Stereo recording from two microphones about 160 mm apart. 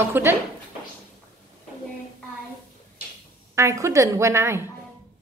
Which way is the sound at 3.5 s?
20° right (ahead or behind).